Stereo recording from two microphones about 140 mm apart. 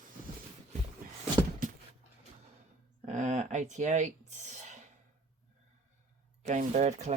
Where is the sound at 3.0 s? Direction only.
60° right (ahead or behind).